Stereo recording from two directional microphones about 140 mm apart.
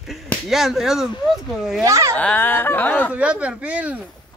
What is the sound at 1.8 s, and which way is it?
Speech, 20° right (ahead or behind).